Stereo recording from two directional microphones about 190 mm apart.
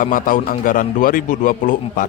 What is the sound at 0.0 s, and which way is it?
Speech, 45° left (ahead or behind).